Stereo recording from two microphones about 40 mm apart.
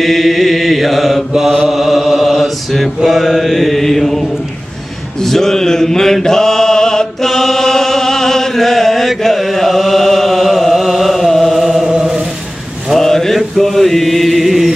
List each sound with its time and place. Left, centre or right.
0.0 s mantra: centre
5.2 s speech: centre
6.2 s chant: centre
11.9 s chant: right
12.9 s mantra: centre